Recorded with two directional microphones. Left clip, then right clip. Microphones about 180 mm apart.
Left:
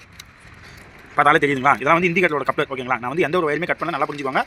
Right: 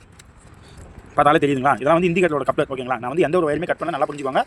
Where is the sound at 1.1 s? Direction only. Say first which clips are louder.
Even; 35° right (ahead or behind).